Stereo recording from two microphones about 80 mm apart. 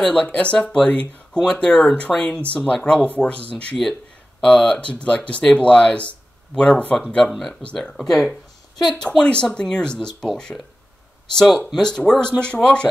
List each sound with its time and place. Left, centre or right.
0.0 s speech: centre